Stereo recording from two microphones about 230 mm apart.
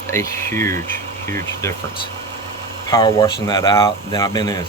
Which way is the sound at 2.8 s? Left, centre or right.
Centre.